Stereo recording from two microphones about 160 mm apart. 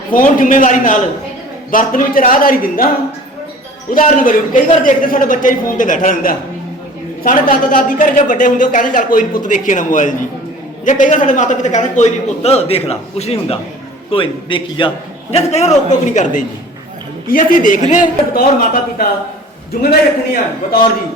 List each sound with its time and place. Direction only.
0.1 s a man's voice: 55° left (ahead or behind)
3.9 s a man's voice: 55° left (ahead or behind)